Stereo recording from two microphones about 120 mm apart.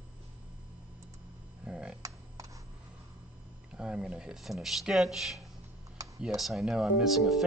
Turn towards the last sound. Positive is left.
turn(degrees=0)  # may be behind; listen again after turning